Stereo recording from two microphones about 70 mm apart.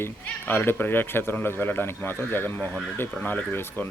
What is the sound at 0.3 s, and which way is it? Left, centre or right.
Speech, left.